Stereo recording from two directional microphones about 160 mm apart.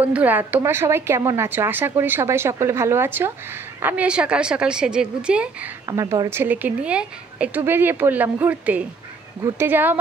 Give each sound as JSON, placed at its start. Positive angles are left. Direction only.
{"t": 0.0, "sound": "a woman's voice", "side_deg": -10}
{"t": 5.9, "sound": "speech", "side_deg": -20}
{"t": 6.4, "sound": "a woman's voice", "side_deg": -10}